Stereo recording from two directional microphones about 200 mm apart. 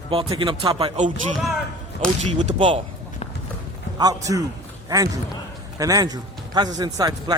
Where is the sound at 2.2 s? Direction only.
30° right (ahead or behind).